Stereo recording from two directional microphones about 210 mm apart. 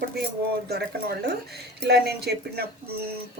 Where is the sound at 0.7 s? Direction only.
50° right (ahead or behind).